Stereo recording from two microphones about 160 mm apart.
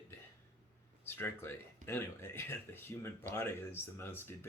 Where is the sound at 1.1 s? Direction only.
15° left (ahead or behind).